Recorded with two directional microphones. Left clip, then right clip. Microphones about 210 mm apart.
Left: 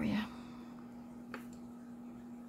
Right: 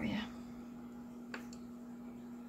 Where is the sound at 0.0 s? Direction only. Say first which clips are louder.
Left 2 dB; 25° left (ahead or behind).